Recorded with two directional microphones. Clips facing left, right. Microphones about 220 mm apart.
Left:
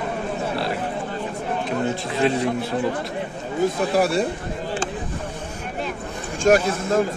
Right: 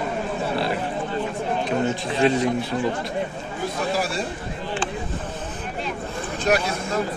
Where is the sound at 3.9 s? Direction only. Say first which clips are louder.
Left 10 dB; 60° left (ahead or behind).